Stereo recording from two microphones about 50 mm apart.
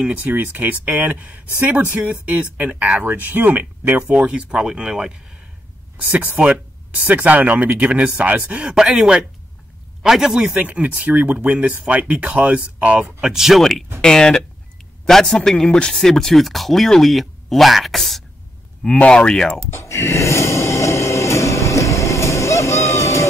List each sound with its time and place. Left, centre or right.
0.0 s speech: right
0.3 s speech: right
4.1 s speech: right
5.9 s speech: right
8.7 s speech: centre
10.4 s speech: right
13.2 s speech: centre
13.6 s speech: centre
18.9 s speech: left
19.7 s music: left